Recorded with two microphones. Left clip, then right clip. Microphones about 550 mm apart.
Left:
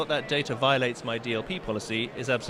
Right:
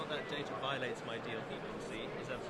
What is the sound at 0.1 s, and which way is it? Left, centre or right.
Speech, left.